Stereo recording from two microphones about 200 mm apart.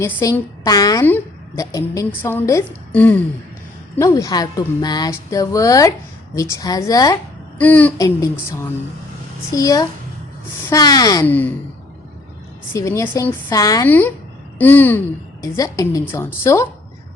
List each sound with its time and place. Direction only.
0.0 s a woman's voice: 15° left (ahead or behind)
12.7 s a woman's voice: 15° left (ahead or behind)